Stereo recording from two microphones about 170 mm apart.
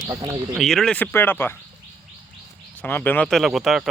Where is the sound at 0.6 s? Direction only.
Centre (ahead or behind).